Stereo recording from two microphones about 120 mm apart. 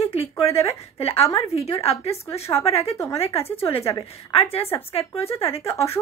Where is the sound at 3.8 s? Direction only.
25° left (ahead or behind).